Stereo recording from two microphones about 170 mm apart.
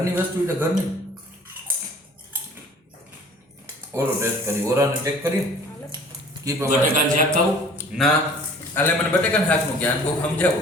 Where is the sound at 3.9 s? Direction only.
15° right (ahead or behind).